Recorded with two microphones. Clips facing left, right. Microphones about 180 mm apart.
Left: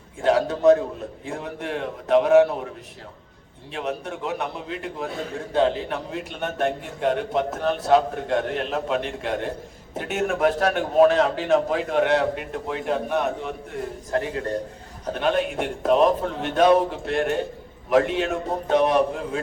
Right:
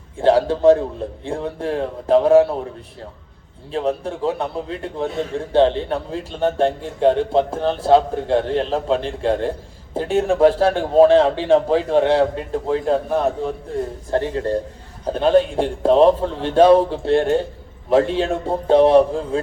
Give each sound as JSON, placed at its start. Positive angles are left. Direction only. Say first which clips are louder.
{"t": 0.2, "sound": "a man's voice", "louder": "right 5 dB", "side_deg": -30}
{"t": 3.7, "sound": "a man's voice", "louder": "right 7 dB", "side_deg": -30}